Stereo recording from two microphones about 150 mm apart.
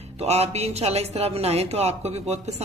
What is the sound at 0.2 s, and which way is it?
Speech, 45° right (ahead or behind).